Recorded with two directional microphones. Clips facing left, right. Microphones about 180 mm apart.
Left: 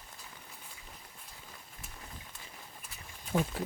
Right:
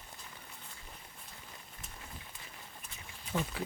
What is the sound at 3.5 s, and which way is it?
Speech, 45° left (ahead or behind).